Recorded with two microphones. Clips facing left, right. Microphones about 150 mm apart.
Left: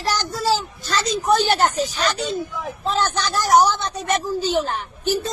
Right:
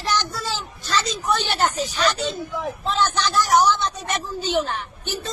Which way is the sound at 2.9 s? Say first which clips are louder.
Left 1 dB; 45° left (ahead or behind).